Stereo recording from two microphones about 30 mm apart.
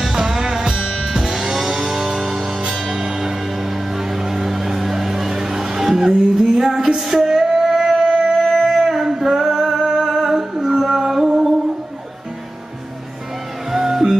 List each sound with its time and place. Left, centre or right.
0.0 s music: centre
8.5 s a sound: centre
9.8 s music: centre
13.7 s music: centre